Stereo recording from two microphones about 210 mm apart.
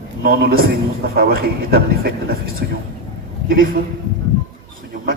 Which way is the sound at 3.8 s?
45° right (ahead or behind).